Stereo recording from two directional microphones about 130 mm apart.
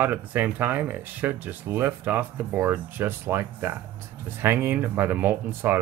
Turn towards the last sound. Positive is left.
turn(degrees=-15)  # may be behind; listen again after turning